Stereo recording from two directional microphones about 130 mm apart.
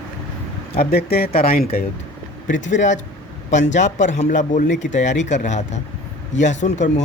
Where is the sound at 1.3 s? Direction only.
90° left.